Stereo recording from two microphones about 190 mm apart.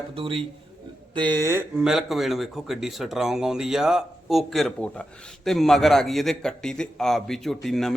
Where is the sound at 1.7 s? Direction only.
5° right (ahead or behind).